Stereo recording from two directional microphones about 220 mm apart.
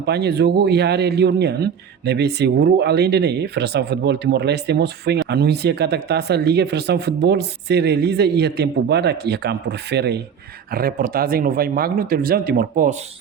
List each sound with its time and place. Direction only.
0.0 s speech: 50° right (ahead or behind)